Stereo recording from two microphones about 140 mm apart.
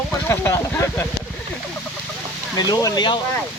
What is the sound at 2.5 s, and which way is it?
Speech, 30° left (ahead or behind).